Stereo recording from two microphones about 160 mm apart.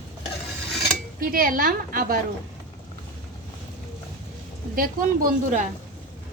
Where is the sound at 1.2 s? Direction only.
65° right (ahead or behind).